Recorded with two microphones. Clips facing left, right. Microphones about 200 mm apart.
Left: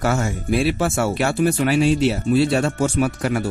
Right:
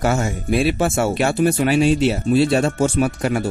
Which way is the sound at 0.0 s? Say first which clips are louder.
Right 1 dB; 20° right (ahead or behind).